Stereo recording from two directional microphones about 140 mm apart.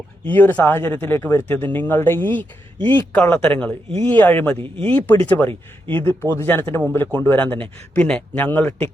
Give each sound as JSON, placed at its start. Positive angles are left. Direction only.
{"t": 0.3, "sound": "speech", "side_deg": 15}